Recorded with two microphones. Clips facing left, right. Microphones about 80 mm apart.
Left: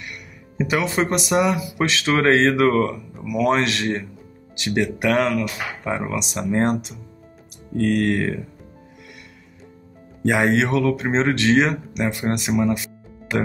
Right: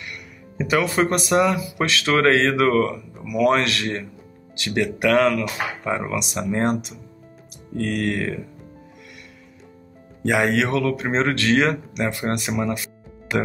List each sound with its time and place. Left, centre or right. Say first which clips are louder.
0.1 s speech: right 1 dB; centre
5.9 s speech: left 1 dB; centre
6.1 s speech: left 2 dB; left
7.8 s speech: left 4 dB; left
10.2 s speech: left 1 dB; left